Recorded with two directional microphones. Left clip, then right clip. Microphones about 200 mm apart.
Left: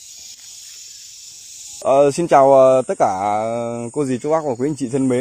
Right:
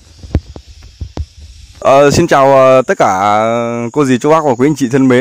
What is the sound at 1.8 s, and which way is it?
Speech, 50° right (ahead or behind).